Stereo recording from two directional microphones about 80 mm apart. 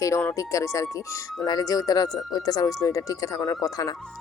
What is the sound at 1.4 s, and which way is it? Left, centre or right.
Speech, left.